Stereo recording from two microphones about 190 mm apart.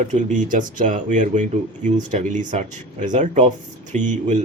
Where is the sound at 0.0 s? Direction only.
40° right (ahead or behind).